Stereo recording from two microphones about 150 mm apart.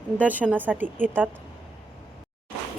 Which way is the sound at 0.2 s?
10° right (ahead or behind).